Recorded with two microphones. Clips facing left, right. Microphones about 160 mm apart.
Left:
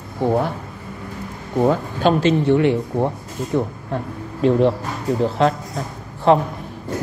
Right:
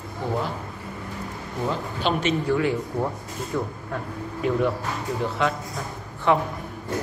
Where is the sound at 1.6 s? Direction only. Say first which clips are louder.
Left 9 dB; 50° left (ahead or behind).